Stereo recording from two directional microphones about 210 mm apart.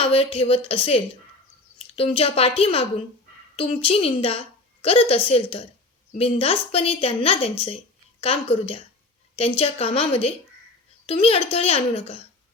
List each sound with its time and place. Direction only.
0.0 s a woman's voice: 25° left (ahead or behind)